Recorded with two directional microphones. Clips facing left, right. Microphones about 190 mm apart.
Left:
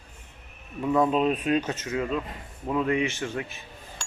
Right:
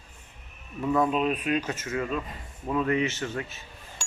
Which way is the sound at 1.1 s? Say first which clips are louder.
Left 3 dB; 30° left (ahead or behind).